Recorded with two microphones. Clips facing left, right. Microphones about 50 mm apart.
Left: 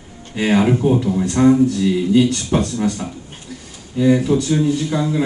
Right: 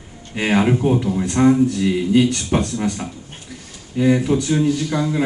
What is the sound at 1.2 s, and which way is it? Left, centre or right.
A man's voice, right.